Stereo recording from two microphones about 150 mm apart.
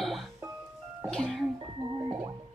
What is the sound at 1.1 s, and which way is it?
Speech, 5° left (ahead or behind).